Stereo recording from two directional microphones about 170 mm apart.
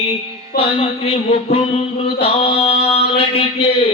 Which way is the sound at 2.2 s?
35° left (ahead or behind).